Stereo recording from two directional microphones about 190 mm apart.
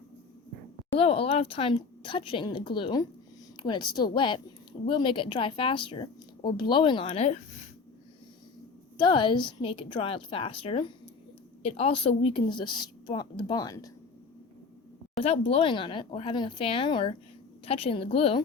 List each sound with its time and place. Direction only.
0.9 s speech: 30° left (ahead or behind)
9.0 s speech: 25° left (ahead or behind)
15.2 s speech: 30° left (ahead or behind)